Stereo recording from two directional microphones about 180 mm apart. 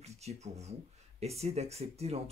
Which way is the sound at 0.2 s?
35° right (ahead or behind).